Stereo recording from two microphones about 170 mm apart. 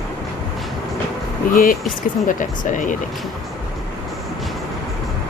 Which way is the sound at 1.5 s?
55° left (ahead or behind).